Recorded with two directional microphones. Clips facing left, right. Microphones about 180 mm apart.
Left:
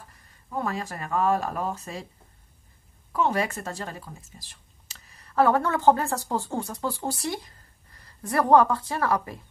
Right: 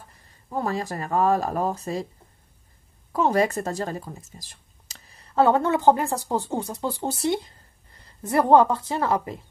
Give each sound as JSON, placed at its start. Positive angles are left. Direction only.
{"t": 0.5, "sound": "speech", "side_deg": -35}
{"t": 3.1, "sound": "speech", "side_deg": -40}
{"t": 5.1, "sound": "a woman's voice", "side_deg": -25}